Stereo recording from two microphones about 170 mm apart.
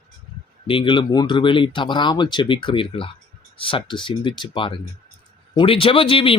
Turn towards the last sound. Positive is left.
turn(degrees=30)  # may be behind; listen again after turning